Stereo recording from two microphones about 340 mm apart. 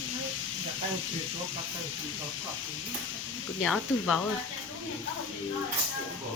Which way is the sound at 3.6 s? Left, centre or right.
Centre.